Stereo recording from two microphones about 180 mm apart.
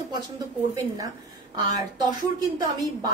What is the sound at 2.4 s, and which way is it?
Speech, 20° right (ahead or behind).